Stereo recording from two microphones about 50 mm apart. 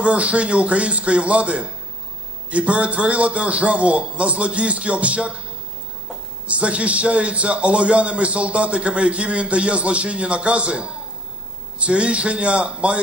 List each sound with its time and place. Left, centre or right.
0.0 s a man's voice: right
6.4 s a man's voice: right